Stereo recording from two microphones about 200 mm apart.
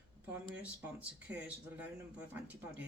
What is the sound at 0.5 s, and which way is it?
Speech, 5° right (ahead or behind).